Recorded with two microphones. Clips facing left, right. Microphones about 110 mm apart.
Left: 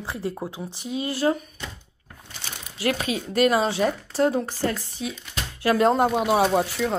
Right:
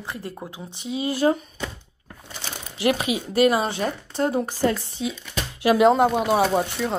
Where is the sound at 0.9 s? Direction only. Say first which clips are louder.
Right 2 dB; 15° right (ahead or behind).